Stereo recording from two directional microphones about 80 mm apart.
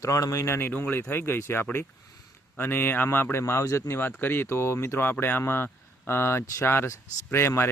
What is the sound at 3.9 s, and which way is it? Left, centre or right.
Speech, left.